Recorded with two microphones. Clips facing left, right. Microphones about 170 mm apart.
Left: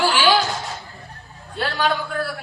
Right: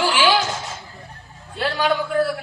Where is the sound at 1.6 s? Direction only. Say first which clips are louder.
Right 2 dB; 15° right (ahead or behind).